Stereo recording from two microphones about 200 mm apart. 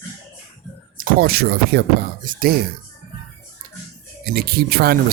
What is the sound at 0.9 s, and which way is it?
Speech, 45° right (ahead or behind).